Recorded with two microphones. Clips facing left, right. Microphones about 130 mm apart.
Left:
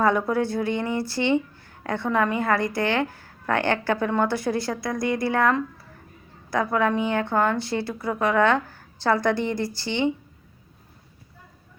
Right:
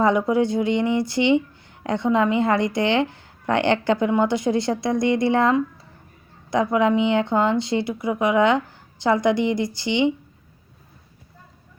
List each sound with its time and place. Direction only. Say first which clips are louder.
0.0 s a woman's voice: right 3 dB; 15° right (ahead or behind)